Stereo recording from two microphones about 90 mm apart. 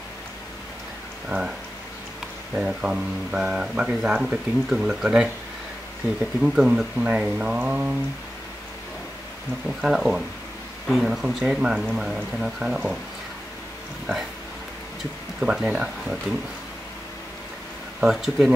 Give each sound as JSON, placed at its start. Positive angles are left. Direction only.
{"t": 1.3, "sound": "speech", "side_deg": -20}
{"t": 2.5, "sound": "speech", "side_deg": -5}
{"t": 6.4, "sound": "speech", "side_deg": -10}
{"t": 9.8, "sound": "speech", "side_deg": -5}
{"t": 15.4, "sound": "speech", "side_deg": -10}
{"t": 18.0, "sound": "speech", "side_deg": -5}